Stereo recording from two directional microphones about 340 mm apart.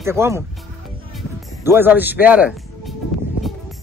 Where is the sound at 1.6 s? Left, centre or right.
Centre.